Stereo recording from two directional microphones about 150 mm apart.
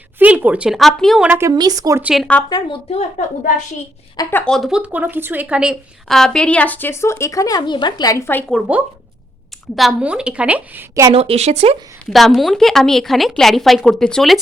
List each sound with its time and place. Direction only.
0.2 s a woman's voice: 10° right (ahead or behind)
1.3 s a woman's voice: 15° right (ahead or behind)
2.0 s a woman's voice: 10° right (ahead or behind)
2.5 s speech: 25° left (ahead or behind)
2.9 s a woman's voice: 50° left (ahead or behind)
4.3 s a woman's voice: 15° left (ahead or behind)
4.5 s a woman's voice: 5° right (ahead or behind); by 8.4 s 15° left (ahead or behind)
9.7 s a woman's voice: 5° right (ahead or behind)
11.1 s speech: 40° right (ahead or behind)
12.0 s speech: centre (ahead or behind)